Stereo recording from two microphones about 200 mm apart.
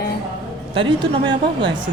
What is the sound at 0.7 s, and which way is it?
Speech, 25° right (ahead or behind).